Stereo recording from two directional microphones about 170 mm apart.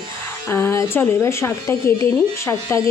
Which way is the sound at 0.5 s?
15° left (ahead or behind).